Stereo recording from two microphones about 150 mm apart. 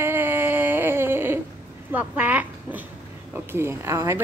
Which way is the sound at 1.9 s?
10° right (ahead or behind).